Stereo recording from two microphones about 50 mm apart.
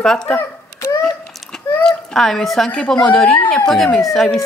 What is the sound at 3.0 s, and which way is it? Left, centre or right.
Speech, centre.